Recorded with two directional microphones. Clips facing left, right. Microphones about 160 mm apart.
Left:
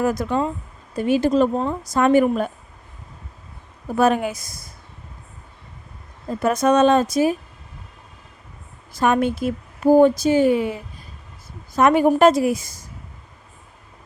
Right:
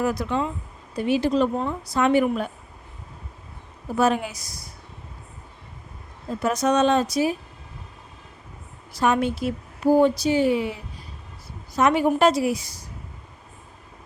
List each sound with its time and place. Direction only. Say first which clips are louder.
0.0 s a woman's voice: left 3 dB; 45° left (ahead or behind)
3.9 s a woman's voice: left 3 dB; 55° left (ahead or behind)
6.4 s a woman's voice: left 4 dB; 55° left (ahead or behind)
9.0 s a woman's voice: left 3 dB; 50° left (ahead or behind)